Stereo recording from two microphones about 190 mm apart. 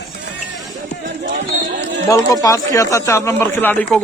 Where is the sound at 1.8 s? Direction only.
65° right (ahead or behind).